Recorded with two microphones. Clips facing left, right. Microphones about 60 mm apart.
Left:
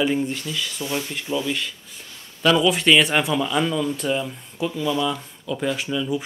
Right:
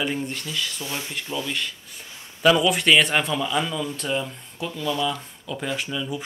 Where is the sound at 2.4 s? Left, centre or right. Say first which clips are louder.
Even; centre.